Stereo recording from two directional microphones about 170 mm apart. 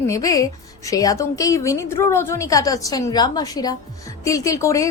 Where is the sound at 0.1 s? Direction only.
20° left (ahead or behind).